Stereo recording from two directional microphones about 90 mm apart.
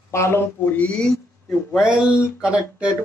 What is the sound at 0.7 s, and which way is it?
Speech, 10° left (ahead or behind).